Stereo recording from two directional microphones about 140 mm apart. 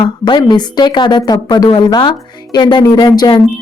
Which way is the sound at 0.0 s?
30° left (ahead or behind).